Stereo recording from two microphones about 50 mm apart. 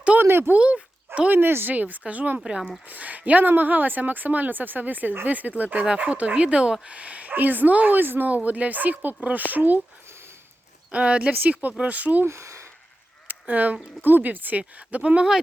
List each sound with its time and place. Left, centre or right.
0.2 s a sound: right
0.5 s a sound: right
1.3 s speech: right
1.7 s speech: right
2.4 s speech: centre
2.8 s speech: right
8.4 s speech: right
10.9 s speech: right
12.3 s speech: right
13.5 s speech: right